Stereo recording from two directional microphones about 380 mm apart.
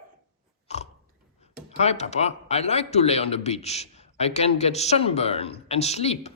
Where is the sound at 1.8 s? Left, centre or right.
Centre.